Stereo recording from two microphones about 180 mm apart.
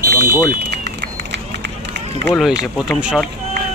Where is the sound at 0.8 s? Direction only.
70° right (ahead or behind).